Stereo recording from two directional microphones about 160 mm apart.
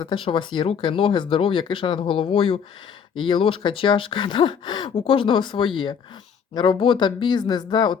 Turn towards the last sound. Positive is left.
turn(degrees=25)  # may be behind; listen again after turning